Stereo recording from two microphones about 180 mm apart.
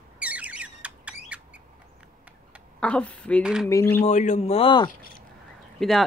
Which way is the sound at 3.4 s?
5° right (ahead or behind).